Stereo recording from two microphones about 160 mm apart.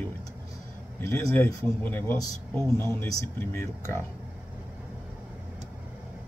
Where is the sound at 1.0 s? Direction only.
15° left (ahead or behind).